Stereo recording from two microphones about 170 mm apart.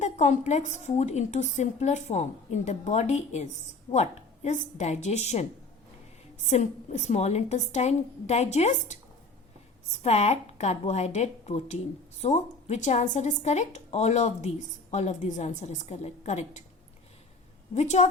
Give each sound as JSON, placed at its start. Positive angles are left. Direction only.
{"t": 0.0, "sound": "a woman's voice", "side_deg": 45}
{"t": 10.0, "sound": "speech", "side_deg": 40}
{"t": 17.7, "sound": "speech", "side_deg": 40}